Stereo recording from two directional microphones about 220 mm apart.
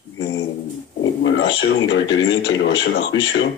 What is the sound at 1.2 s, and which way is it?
A man's voice, 55° left (ahead or behind).